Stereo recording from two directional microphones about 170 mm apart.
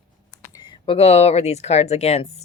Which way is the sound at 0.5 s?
30° left (ahead or behind).